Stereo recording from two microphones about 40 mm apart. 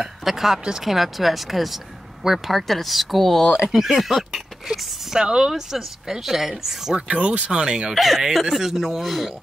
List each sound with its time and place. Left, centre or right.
0.2 s speech: centre
4.6 s speech: centre
5.5 s speech: centre
7.1 s speech: right
7.9 s speech: centre